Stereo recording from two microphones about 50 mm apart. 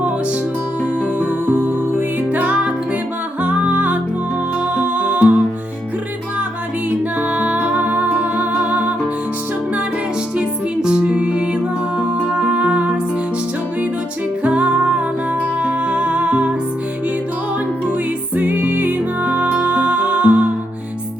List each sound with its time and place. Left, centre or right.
1.5 s music: right
7.2 s music: right
10.3 s music: centre
14.4 s music: right
18.3 s music: right